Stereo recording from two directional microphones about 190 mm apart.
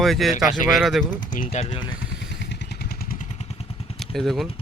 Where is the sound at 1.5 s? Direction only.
35° left (ahead or behind).